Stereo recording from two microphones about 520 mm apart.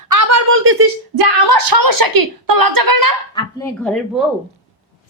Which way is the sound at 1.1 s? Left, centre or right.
Right.